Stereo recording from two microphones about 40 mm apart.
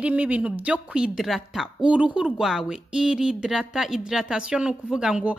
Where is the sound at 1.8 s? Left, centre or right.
Right.